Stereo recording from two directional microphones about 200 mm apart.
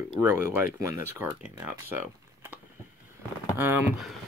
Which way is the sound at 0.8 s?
15° right (ahead or behind).